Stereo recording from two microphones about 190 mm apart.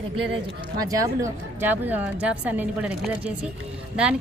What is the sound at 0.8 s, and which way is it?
A woman's voice, 20° right (ahead or behind).